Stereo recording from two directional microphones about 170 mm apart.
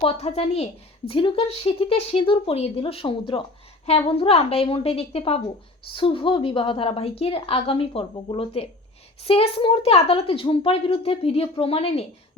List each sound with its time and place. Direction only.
0.0 s a woman's voice: 35° left (ahead or behind)